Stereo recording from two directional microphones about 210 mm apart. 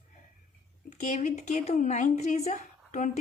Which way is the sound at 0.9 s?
35° left (ahead or behind).